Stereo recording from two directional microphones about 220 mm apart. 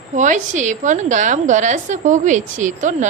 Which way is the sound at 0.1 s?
35° right (ahead or behind).